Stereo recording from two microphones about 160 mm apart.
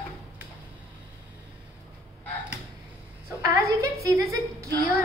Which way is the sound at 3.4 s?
20° right (ahead or behind).